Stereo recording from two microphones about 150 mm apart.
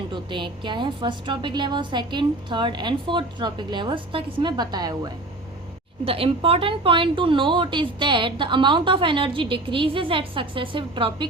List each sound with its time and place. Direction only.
0.1 s a woman's voice: 30° right (ahead or behind)
6.1 s a woman's voice: 40° right (ahead or behind)